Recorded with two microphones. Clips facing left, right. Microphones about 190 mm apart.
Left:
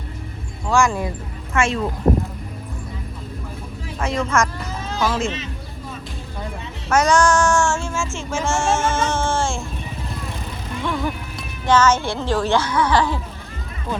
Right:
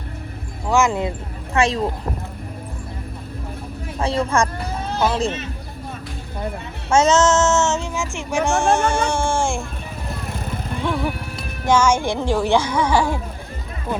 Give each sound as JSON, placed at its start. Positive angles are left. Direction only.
{"t": 0.7, "sound": "child singing", "side_deg": -20}
{"t": 1.5, "sound": "speech", "side_deg": -35}
{"t": 4.0, "sound": "speech", "side_deg": -35}
{"t": 4.7, "sound": "a sound", "side_deg": -60}
{"t": 6.9, "sound": "child singing", "side_deg": -25}
{"t": 8.4, "sound": "speech", "side_deg": -15}
{"t": 10.8, "sound": "music", "side_deg": -10}
{"t": 11.7, "sound": "speech", "side_deg": -10}